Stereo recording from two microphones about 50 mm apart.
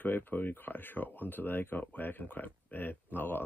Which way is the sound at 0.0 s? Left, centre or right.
Left.